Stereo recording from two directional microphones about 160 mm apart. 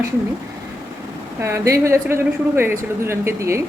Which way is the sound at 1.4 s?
20° right (ahead or behind).